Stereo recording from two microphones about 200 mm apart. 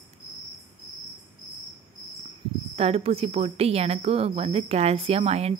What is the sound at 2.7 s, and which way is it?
A woman's voice, 30° right (ahead or behind).